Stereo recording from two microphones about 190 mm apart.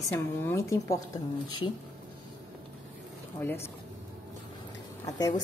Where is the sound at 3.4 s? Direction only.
10° left (ahead or behind).